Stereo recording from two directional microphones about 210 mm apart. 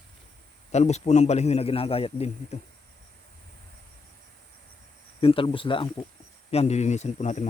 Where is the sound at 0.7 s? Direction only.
30° left (ahead or behind).